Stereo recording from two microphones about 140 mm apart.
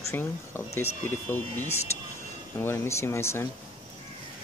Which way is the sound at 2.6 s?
15° left (ahead or behind).